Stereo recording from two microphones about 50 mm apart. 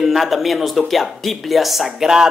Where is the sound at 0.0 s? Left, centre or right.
Centre.